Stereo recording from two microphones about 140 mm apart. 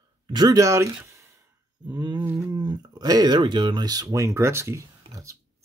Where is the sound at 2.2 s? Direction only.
15° right (ahead or behind).